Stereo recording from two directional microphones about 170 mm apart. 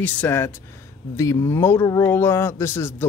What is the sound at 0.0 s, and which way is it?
A man's voice, 10° left (ahead or behind).